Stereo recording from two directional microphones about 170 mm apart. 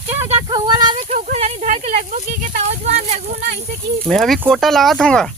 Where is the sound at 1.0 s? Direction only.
45° right (ahead or behind).